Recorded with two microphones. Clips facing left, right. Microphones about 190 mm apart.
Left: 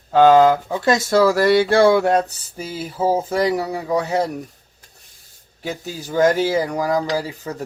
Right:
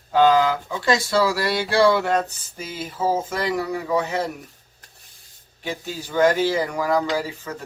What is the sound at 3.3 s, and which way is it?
Speech, 35° left (ahead or behind).